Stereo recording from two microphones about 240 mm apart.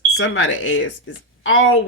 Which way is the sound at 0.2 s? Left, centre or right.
Left.